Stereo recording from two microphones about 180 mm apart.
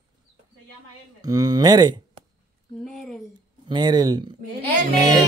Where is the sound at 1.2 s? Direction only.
20° right (ahead or behind).